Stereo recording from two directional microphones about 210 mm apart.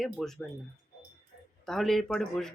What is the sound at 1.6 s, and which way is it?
Speech, centre (ahead or behind).